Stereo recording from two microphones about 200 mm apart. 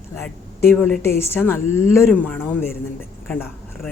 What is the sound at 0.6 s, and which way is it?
A woman's voice, 10° left (ahead or behind).